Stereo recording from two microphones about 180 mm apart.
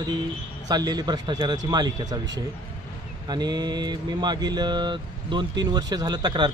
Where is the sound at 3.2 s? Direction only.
25° right (ahead or behind).